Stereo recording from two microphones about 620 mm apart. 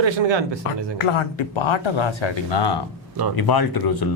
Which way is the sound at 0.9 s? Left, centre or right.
Left.